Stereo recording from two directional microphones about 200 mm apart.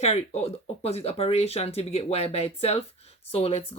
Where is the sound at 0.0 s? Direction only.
35° left (ahead or behind).